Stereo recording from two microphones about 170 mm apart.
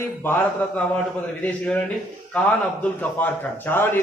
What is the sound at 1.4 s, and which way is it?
A man's voice, 10° left (ahead or behind).